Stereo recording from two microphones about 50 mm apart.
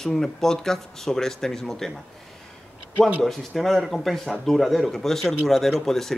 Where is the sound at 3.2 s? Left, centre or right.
Centre.